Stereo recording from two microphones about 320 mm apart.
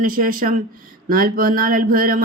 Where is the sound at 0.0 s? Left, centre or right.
Right.